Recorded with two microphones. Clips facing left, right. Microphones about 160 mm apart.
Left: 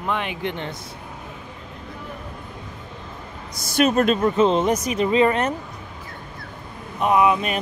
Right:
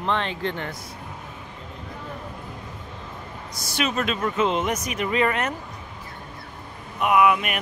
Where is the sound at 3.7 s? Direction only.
45° left (ahead or behind).